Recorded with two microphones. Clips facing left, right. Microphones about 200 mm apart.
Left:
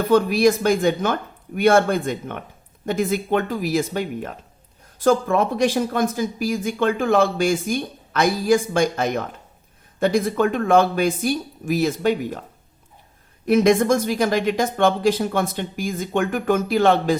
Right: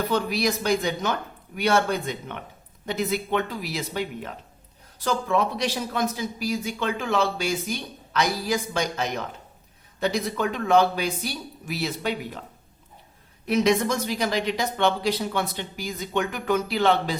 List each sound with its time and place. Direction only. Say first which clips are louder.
0.1 s speech: left 8 dB; 50° left (ahead or behind)
13.5 s speech: left 6 dB; 50° left (ahead or behind)